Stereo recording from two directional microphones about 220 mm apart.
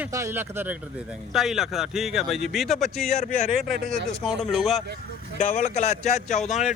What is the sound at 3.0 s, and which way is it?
Speech, 30° left (ahead or behind).